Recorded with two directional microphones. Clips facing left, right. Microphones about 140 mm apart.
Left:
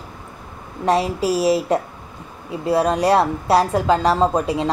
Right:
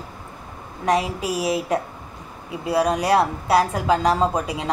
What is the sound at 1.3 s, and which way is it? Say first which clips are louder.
Speech: left 5 dB; 15° right (ahead or behind).